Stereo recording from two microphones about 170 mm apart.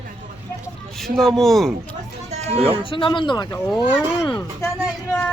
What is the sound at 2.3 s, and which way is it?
Speech, 40° right (ahead or behind).